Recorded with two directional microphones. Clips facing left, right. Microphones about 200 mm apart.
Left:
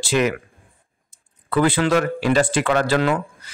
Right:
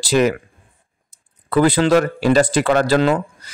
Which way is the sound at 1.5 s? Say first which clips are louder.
Right 4 dB; 40° right (ahead or behind).